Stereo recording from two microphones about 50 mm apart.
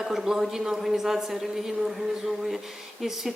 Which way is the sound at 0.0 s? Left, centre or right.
Centre.